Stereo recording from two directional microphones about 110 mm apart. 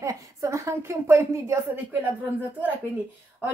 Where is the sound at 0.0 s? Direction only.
30° right (ahead or behind).